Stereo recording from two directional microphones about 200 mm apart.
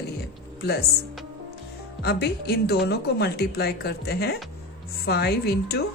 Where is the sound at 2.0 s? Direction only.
55° left (ahead or behind).